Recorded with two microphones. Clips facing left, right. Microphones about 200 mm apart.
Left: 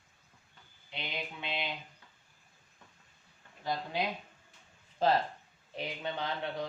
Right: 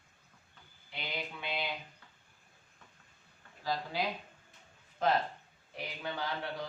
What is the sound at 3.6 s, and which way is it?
Speech, 20° left (ahead or behind).